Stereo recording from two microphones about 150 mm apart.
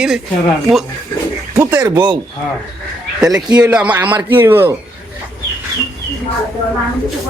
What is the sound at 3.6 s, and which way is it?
Speech, 10° right (ahead or behind).